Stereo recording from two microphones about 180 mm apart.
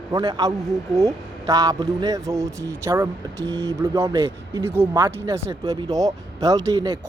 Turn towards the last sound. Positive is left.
turn(degrees=-20)  # may be behind; listen again after turning